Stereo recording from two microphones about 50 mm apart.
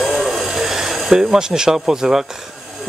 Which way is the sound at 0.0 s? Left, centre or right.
Centre.